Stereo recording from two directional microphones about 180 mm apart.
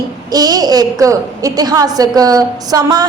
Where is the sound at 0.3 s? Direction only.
20° right (ahead or behind).